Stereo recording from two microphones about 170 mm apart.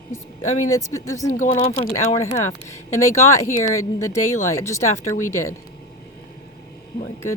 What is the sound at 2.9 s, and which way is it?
Speech, 15° left (ahead or behind).